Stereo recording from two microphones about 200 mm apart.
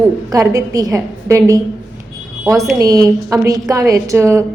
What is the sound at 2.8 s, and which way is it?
A woman's voice, 15° right (ahead or behind).